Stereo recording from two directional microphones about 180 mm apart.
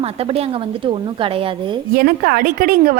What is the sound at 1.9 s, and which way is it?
Speech, 55° right (ahead or behind).